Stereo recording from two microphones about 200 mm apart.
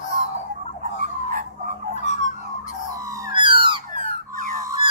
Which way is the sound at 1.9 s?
35° left (ahead or behind).